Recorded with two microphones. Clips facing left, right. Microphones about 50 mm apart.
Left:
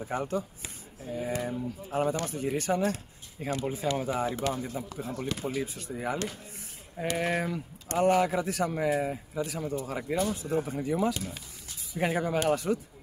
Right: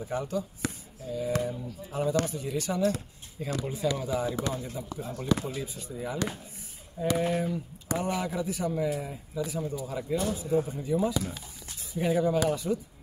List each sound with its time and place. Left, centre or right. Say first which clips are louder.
0.1 s speech: left 1 dB; left
0.6 s a sound: right 11 dB; right
1.1 s speech: right 2 dB; left
3.4 s speech: left 2 dB; left
3.7 s speech: right 3 dB; left
5.7 s speech: left 2 dB; left
10.3 s speech: right 2 dB; left